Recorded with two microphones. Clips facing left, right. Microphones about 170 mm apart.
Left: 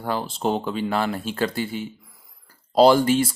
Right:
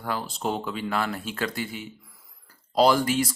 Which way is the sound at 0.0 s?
30° left (ahead or behind).